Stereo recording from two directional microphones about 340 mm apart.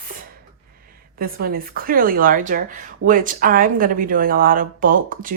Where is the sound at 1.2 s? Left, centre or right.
Right.